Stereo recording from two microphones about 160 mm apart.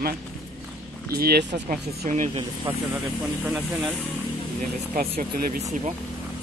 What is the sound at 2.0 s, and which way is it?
Speech, 50° right (ahead or behind).